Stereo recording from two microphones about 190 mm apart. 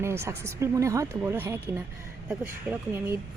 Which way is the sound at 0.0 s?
15° right (ahead or behind).